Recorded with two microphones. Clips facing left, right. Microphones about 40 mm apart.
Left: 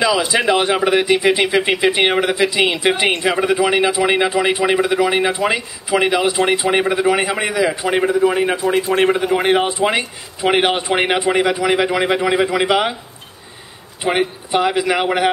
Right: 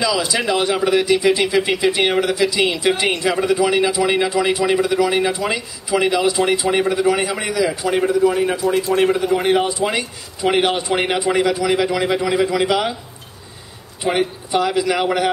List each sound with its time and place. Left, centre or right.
0.0 s speech: left
14.0 s speech: centre
14.5 s speech: left